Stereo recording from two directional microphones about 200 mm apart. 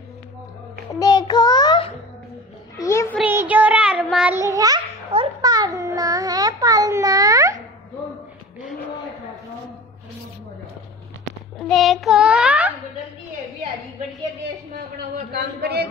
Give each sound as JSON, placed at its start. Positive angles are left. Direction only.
{"t": 0.9, "sound": "child singing", "side_deg": 20}
{"t": 2.8, "sound": "a sound", "side_deg": 15}
{"t": 3.2, "sound": "child singing", "side_deg": -10}
{"t": 11.6, "sound": "child singing", "side_deg": 0}
{"t": 15.3, "sound": "speech", "side_deg": -55}